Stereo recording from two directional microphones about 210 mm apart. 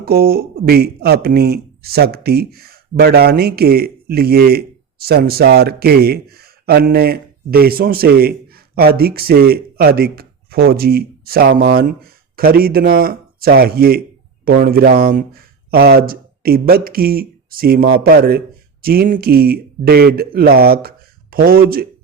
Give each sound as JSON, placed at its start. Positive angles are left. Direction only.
{"t": 0.0, "sound": "speech", "side_deg": -45}